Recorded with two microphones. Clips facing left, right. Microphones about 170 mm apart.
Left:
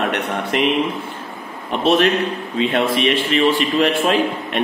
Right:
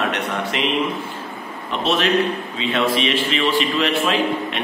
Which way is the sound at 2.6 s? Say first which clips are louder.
Left 3 dB; 50° left (ahead or behind).